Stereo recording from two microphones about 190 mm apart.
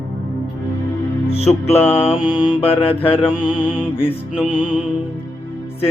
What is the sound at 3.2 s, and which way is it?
Mantra, 5° right (ahead or behind).